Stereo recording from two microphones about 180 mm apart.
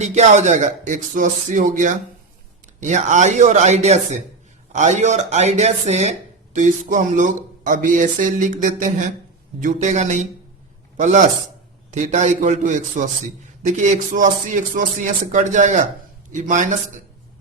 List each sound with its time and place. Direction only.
0.0 s speech: 40° right (ahead or behind)